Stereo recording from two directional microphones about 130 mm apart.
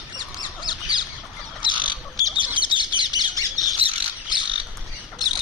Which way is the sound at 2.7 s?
40° right (ahead or behind).